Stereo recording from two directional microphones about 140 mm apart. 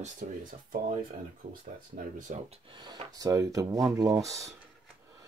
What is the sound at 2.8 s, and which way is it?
Speech, 30° right (ahead or behind).